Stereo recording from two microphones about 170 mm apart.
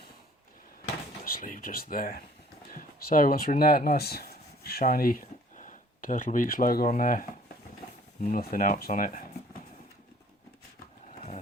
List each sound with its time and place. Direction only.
1.2 s speech: 55° left (ahead or behind)